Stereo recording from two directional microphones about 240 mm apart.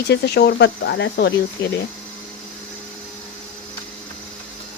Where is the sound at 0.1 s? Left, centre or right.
Left.